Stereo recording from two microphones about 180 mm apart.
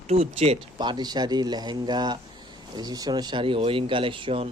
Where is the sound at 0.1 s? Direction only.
35° right (ahead or behind).